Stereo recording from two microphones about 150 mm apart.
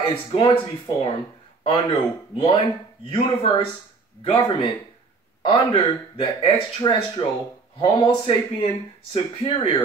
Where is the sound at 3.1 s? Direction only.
35° left (ahead or behind).